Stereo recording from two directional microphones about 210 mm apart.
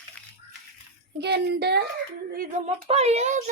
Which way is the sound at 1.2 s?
50° right (ahead or behind).